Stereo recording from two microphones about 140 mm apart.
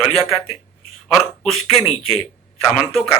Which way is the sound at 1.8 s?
45° left (ahead or behind).